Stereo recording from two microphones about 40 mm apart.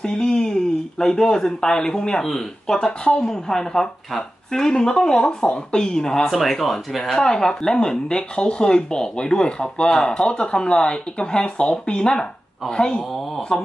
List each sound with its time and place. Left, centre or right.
0.0 s speech: left; by 7.1 s centre
7.1 s speech: centre